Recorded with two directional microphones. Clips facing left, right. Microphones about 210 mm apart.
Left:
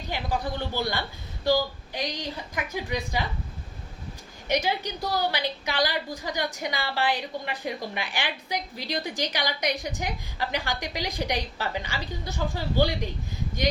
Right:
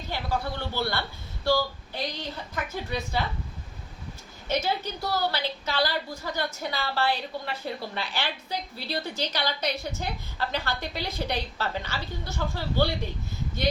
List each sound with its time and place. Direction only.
0.1 s a woman's voice: 15° left (ahead or behind)
4.4 s a woman's voice: 15° left (ahead or behind)